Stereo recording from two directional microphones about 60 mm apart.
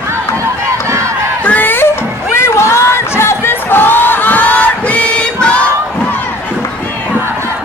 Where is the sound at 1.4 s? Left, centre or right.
Left.